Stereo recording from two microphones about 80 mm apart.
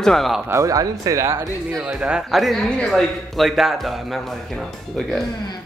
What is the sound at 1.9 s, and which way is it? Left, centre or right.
Speech, centre.